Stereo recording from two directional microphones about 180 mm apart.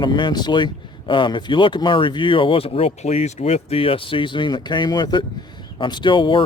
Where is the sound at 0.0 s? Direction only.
25° left (ahead or behind).